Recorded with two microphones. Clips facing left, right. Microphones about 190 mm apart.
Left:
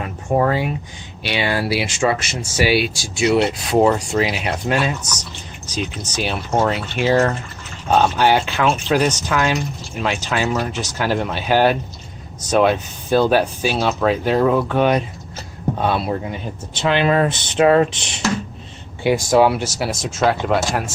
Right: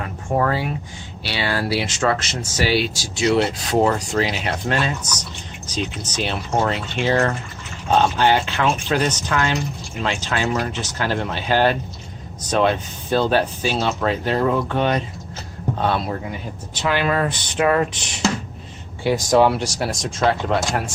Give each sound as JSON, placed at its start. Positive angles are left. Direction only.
{"t": 0.0, "sound": "a sound", "side_deg": 20}
{"t": 1.2, "sound": "speech", "side_deg": 15}
{"t": 16.7, "sound": "speech", "side_deg": 25}
{"t": 19.0, "sound": "speech", "side_deg": 10}